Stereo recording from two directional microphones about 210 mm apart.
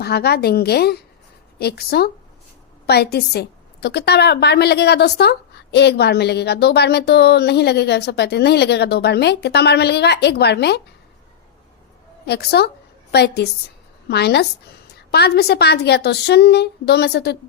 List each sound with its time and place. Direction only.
0.0 s a woman's voice: 50° left (ahead or behind)
12.2 s a woman's voice: 50° left (ahead or behind)